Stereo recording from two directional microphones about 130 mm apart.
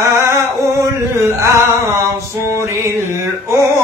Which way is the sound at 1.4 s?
20° right (ahead or behind).